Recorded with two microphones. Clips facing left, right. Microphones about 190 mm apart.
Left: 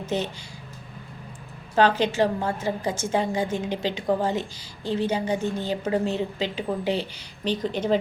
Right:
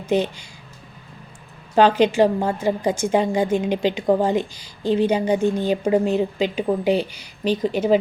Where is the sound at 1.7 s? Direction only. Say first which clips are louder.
Right 5 dB; 15° right (ahead or behind).